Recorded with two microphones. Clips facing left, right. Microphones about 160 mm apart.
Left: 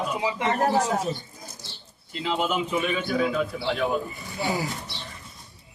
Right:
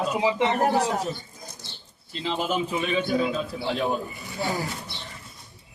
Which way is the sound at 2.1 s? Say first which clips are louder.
Left 1 dB; 30° right (ahead or behind).